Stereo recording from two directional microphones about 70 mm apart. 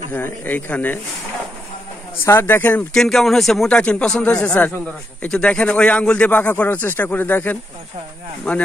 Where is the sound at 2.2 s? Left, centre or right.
Left.